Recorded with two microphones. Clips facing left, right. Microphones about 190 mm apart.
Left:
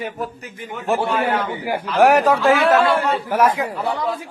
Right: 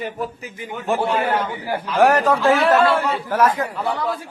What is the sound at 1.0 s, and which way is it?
Speech, 10° right (ahead or behind).